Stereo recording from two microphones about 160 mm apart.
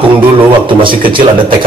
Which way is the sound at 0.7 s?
30° right (ahead or behind).